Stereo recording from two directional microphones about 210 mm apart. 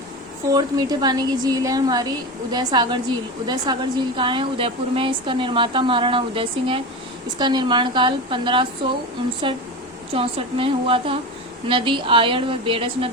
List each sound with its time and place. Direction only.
0.4 s speech: 20° right (ahead or behind)
10.1 s speech: 25° right (ahead or behind)